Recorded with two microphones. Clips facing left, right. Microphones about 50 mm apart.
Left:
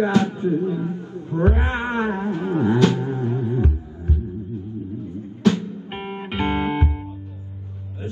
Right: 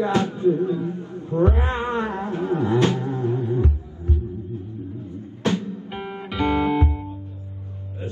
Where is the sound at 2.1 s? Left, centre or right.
Right.